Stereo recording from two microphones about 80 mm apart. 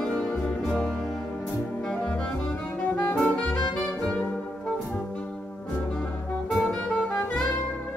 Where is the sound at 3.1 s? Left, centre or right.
Centre.